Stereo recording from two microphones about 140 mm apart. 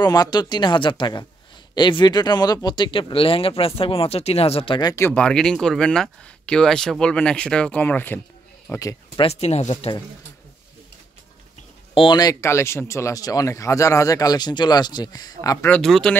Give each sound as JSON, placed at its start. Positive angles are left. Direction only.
{"t": 0.0, "sound": "speech", "side_deg": 30}
{"t": 4.9, "sound": "speech", "side_deg": 10}
{"t": 8.7, "sound": "speech", "side_deg": 25}
{"t": 9.2, "sound": "speech", "side_deg": 50}
{"t": 11.9, "sound": "speech", "side_deg": 35}
{"t": 15.7, "sound": "speech", "side_deg": 5}